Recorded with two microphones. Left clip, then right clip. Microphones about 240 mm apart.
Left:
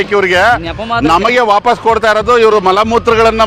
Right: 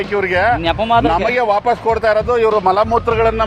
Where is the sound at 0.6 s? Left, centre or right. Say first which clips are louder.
Right 2 dB; centre.